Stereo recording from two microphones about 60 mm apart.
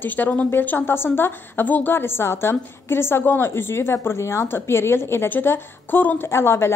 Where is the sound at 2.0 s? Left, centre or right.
Left.